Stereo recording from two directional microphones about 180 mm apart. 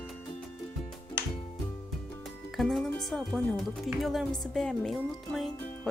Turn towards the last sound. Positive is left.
turn(degrees=0)  # may be behind; listen again after turning